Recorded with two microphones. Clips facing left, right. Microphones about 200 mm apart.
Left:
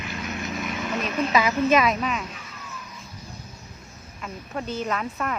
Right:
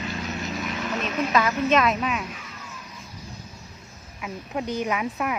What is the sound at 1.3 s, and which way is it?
Speech, 5° left (ahead or behind).